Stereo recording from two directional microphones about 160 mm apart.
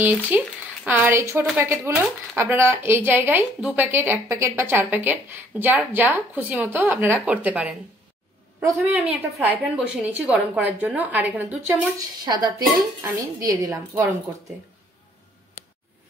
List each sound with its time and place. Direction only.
0.3 s a woman's voice: 10° right (ahead or behind)
12.3 s a woman's voice: 25° right (ahead or behind)